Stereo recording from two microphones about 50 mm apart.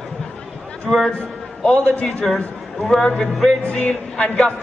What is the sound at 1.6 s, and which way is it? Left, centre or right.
Speech, left.